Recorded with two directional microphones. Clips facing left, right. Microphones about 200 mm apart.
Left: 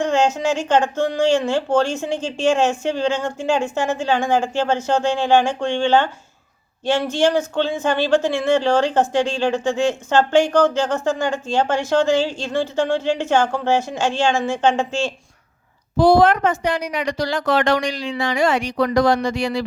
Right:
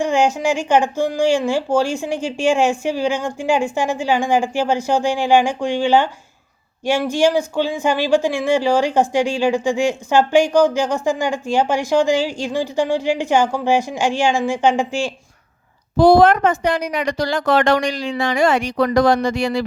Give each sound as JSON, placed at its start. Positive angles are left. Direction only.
{"t": 0.0, "sound": "speech", "side_deg": -10}
{"t": 16.0, "sound": "a woman's voice", "side_deg": -45}